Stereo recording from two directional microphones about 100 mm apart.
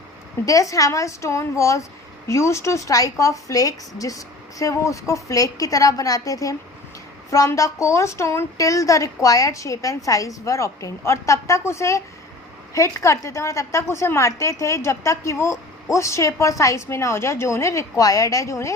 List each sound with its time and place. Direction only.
0.4 s a woman's voice: 35° left (ahead or behind)